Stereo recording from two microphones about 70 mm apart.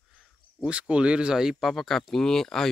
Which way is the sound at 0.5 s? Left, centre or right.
Centre.